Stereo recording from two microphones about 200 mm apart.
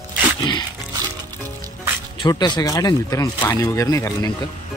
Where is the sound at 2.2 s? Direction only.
20° left (ahead or behind).